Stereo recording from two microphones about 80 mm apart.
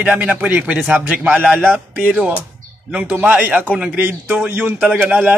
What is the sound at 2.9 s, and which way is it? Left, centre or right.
Speech, right.